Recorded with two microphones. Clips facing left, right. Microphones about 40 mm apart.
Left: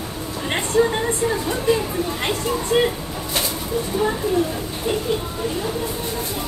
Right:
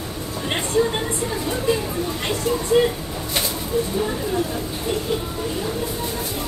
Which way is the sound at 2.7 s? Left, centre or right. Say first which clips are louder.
Right 1 dB; left.